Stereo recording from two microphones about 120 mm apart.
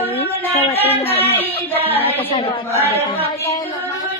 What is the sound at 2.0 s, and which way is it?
Speech, 55° left (ahead or behind).